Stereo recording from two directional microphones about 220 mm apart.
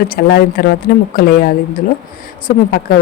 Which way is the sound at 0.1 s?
45° left (ahead or behind).